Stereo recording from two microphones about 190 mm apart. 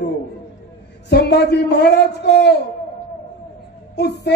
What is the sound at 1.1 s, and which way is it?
Child singing, 60° left (ahead or behind).